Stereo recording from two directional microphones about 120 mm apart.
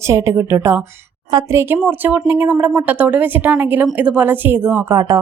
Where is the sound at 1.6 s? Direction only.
15° right (ahead or behind).